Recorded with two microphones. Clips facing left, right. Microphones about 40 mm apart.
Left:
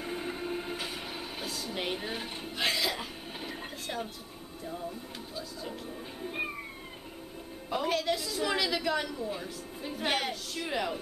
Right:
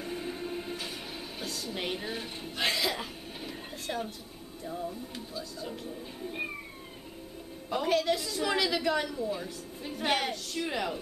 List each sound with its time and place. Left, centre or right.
0.0 s music: centre
2.5 s a sound: centre
7.7 s a woman's voice: centre